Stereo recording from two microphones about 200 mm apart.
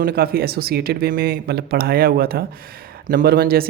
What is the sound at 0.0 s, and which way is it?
Speech, 50° right (ahead or behind).